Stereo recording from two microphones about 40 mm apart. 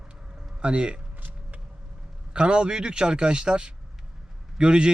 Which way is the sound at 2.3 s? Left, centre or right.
Right.